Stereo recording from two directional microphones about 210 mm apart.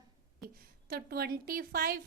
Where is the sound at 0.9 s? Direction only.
50° right (ahead or behind).